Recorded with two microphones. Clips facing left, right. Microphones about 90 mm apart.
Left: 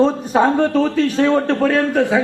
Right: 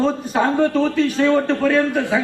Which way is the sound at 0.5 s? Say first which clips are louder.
Left 1 dB; 40° left (ahead or behind).